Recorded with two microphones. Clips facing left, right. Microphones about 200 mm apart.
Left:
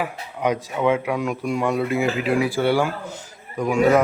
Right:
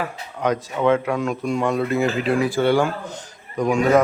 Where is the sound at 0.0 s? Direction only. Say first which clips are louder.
Even; 10° left (ahead or behind).